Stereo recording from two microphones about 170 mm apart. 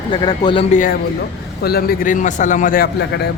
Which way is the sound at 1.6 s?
65° left (ahead or behind).